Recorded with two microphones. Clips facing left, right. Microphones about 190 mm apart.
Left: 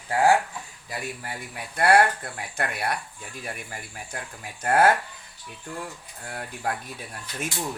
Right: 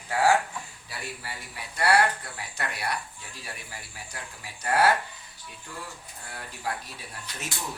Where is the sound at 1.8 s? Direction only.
50° left (ahead or behind).